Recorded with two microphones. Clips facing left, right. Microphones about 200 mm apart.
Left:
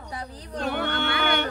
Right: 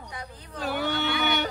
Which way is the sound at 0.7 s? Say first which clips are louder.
Right 2 dB; 60° left (ahead or behind).